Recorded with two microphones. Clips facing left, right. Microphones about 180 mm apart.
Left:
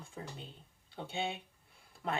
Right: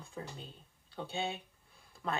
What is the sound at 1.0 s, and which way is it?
Speech, 25° left (ahead or behind).